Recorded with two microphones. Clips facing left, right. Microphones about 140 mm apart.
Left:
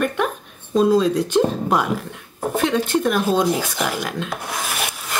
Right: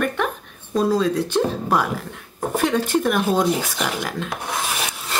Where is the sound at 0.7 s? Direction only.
20° left (ahead or behind).